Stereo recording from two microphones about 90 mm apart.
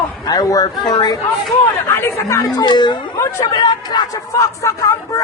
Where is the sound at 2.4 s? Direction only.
55° left (ahead or behind).